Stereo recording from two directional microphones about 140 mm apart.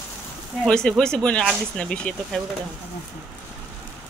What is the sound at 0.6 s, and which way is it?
Speech, 5° left (ahead or behind).